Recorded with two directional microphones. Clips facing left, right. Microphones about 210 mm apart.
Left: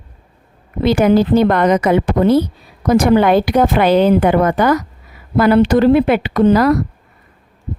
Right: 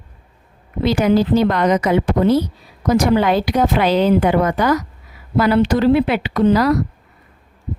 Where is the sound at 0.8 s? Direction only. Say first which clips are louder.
Left 3 dB; 55° left (ahead or behind).